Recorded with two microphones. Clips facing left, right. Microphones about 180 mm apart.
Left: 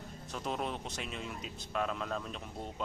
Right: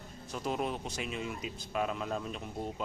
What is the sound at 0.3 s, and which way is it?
Speech, 5° right (ahead or behind).